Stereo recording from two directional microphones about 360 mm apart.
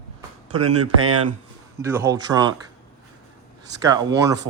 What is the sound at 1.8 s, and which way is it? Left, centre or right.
Speech, centre.